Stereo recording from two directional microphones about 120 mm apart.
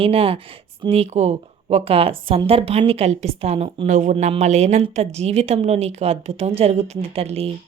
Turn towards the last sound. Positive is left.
turn(degrees=-55)  # may be behind; listen again after turning